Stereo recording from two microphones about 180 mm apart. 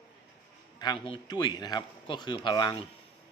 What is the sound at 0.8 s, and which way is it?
A man's voice, 25° left (ahead or behind).